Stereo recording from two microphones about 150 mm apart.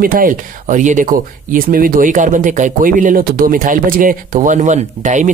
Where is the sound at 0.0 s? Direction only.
70° right (ahead or behind).